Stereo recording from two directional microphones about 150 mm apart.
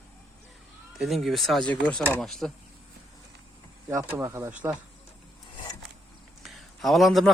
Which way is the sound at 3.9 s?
20° right (ahead or behind).